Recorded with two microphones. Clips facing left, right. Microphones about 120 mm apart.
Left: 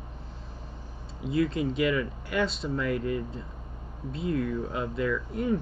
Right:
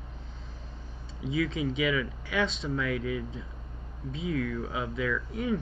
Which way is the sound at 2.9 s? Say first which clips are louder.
Left 2 dB; 90° right.